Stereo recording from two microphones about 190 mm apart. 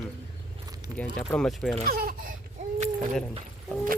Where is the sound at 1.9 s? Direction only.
50° right (ahead or behind).